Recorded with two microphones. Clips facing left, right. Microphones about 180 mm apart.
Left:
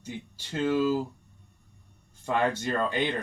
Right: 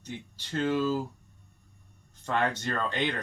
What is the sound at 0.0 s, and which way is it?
Speech, 10° left (ahead or behind).